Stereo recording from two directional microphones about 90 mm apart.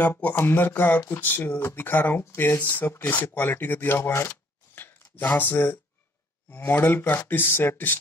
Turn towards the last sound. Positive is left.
turn(degrees=25)  # may be behind; listen again after turning